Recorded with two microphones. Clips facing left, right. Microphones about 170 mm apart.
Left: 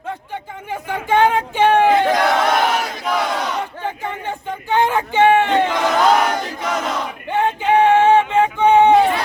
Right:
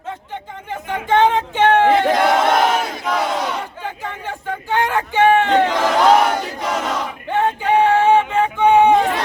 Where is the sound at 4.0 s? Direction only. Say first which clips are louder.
Left 2 dB; 15° left (ahead or behind).